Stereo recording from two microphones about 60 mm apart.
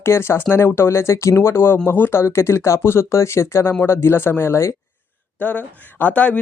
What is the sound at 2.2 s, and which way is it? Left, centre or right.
Speech, left.